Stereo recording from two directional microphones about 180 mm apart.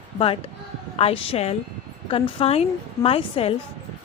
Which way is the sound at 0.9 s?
30° left (ahead or behind).